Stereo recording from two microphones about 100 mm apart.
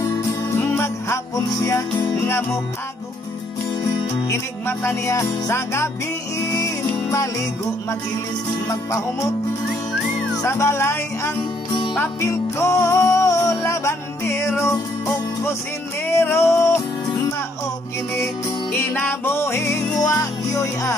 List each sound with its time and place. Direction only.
0.6 s music: 20° left (ahead or behind)
2.0 s music: 25° left (ahead or behind)
4.3 s music: 30° left (ahead or behind)
8.6 s music: 35° left (ahead or behind)
10.3 s speech: 30° left (ahead or behind)
12.2 s music: 30° left (ahead or behind)
18.1 s music: 25° left (ahead or behind)